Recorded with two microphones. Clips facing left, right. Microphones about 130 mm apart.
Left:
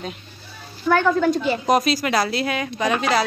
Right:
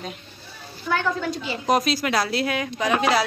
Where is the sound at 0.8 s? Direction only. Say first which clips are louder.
Left 7 dB; 55° left (ahead or behind).